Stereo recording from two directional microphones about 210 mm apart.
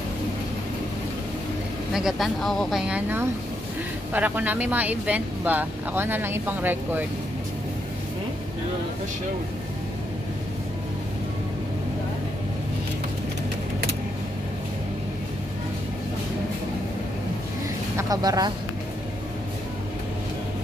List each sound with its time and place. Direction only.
2.0 s speech: centre (ahead or behind)
17.9 s speech: 15° right (ahead or behind)